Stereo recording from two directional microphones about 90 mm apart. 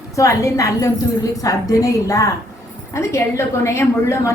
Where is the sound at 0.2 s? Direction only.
35° left (ahead or behind).